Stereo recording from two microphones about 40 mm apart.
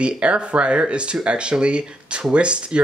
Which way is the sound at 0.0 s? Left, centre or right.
Right.